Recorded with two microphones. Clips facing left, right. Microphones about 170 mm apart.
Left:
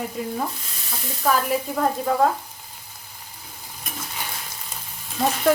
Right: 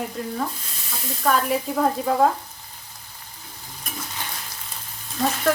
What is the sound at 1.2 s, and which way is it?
Frying, centre (ahead or behind).